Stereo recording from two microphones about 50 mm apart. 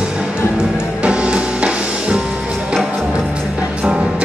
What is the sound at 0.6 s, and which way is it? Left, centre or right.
Music, right.